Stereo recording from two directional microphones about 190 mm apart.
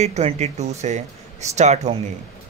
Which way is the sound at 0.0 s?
35° right (ahead or behind).